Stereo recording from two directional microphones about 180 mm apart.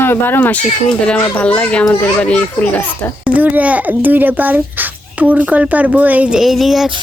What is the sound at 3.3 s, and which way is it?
A child's voice, 10° right (ahead or behind).